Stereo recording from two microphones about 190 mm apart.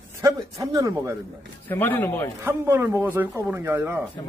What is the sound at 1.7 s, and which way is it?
Speech, 10° left (ahead or behind).